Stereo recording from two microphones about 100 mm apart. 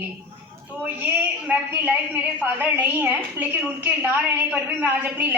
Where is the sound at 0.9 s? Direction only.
15° right (ahead or behind).